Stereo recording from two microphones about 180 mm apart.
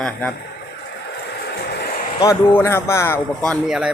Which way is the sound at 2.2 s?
15° left (ahead or behind).